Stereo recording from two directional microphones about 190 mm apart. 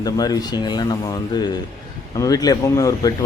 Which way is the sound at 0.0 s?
20° left (ahead or behind).